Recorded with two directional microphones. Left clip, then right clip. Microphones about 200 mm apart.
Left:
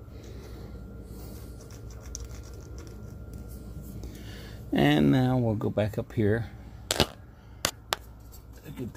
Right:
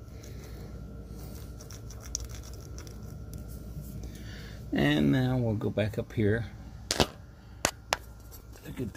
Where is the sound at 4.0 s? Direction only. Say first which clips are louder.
Left 2 dB; 35° left (ahead or behind).